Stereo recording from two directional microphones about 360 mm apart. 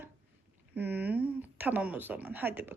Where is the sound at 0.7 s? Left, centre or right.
Centre.